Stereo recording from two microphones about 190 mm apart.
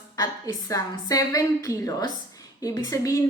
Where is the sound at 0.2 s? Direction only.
20° left (ahead or behind).